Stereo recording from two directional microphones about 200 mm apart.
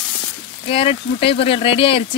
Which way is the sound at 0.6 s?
30° left (ahead or behind).